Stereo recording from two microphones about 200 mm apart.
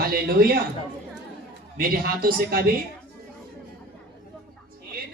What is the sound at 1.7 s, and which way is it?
Speech, 45° right (ahead or behind).